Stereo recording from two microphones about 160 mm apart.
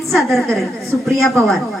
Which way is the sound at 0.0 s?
Centre (ahead or behind).